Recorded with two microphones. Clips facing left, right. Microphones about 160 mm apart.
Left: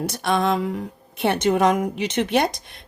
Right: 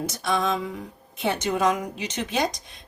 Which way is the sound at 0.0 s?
65° left (ahead or behind).